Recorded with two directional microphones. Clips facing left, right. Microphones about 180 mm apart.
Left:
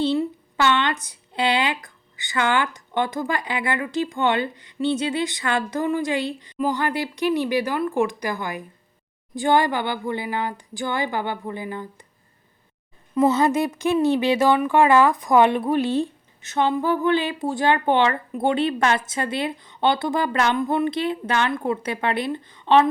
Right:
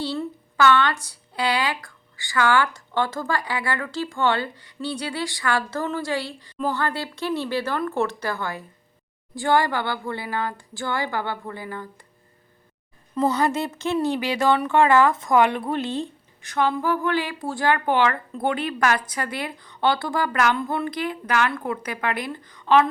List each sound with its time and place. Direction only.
0.0 s speech: 20° left (ahead or behind)
13.3 s speech: 20° left (ahead or behind)
15.8 s speech: 20° right (ahead or behind)
16.4 s speech: 20° left (ahead or behind)